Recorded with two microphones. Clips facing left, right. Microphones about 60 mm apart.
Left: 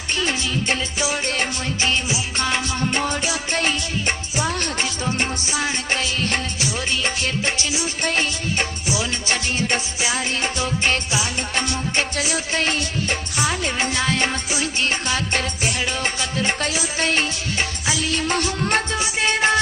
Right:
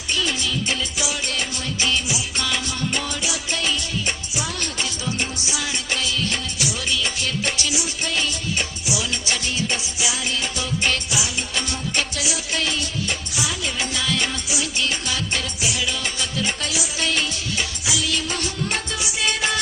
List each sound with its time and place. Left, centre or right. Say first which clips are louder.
0.2 s music: left 2 dB; left